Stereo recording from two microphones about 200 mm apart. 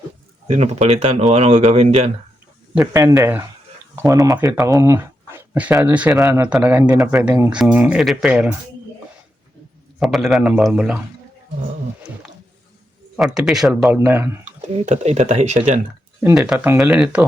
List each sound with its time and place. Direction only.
0.4 s speech: 30° right (ahead or behind)
2.7 s speech: 10° right (ahead or behind)
10.0 s speech: centre (ahead or behind)
13.1 s speech: centre (ahead or behind)
14.8 s speech: 35° right (ahead or behind)
16.2 s speech: 5° right (ahead or behind)